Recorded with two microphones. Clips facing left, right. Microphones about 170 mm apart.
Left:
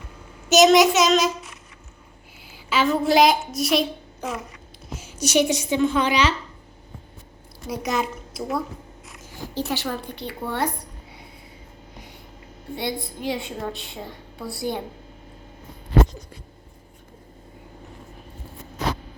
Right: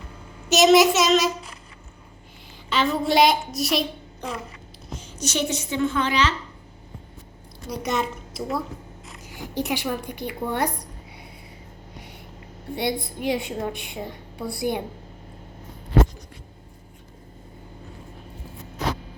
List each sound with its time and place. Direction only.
0.5 s a child's voice: centre (ahead or behind)
2.6 s a woman's voice: 5° left (ahead or behind)
7.7 s a child's voice: centre (ahead or behind)
9.2 s speech: 15° right (ahead or behind)
12.7 s a woman's voice: 20° right (ahead or behind)